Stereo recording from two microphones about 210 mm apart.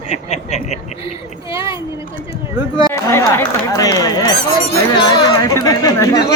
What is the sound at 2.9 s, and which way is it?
Speech, 15° left (ahead or behind).